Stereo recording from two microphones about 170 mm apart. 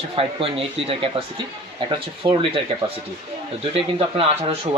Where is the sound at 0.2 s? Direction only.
30° right (ahead or behind).